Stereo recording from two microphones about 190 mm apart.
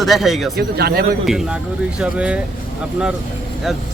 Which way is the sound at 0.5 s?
55° right (ahead or behind).